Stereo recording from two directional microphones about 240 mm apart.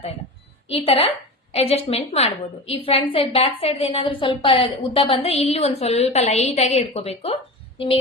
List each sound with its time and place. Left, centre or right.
0.7 s a woman's voice: left